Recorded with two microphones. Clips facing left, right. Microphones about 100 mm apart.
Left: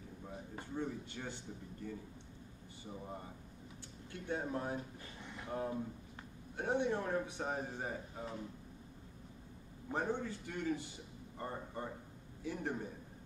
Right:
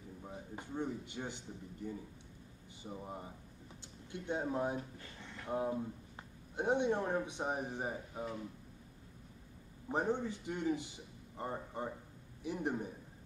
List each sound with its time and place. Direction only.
0.3 s a man's voice: 20° right (ahead or behind)
5.2 s a sound: 15° left (ahead or behind)
5.5 s a man's voice: 20° right (ahead or behind)
9.8 s a man's voice: 20° right (ahead or behind)